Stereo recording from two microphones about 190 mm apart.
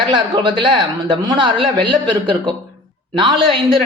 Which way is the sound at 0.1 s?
25° right (ahead or behind).